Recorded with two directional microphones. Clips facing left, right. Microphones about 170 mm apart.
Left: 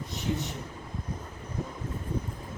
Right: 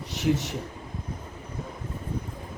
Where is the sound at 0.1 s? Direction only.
80° right.